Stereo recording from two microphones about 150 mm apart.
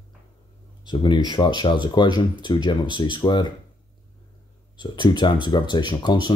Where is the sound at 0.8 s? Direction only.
30° left (ahead or behind).